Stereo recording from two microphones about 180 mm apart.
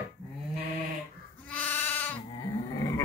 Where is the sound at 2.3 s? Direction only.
20° left (ahead or behind).